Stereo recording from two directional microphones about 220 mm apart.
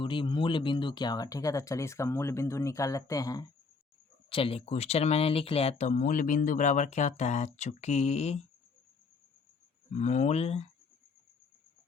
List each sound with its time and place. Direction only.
0.0 s speech: 20° left (ahead or behind)
9.9 s speech: 30° left (ahead or behind)